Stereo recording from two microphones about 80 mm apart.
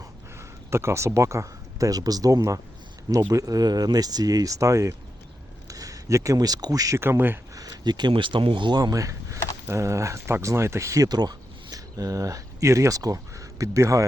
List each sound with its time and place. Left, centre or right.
0.3 s speech: right
7.0 s speech: right
7.5 s speech: right
8.8 s speech: right